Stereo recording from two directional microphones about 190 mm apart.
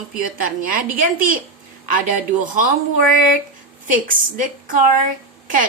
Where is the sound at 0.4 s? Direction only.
45° right (ahead or behind).